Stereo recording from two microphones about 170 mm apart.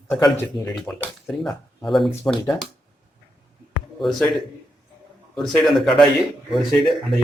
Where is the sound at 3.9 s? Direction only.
Centre (ahead or behind).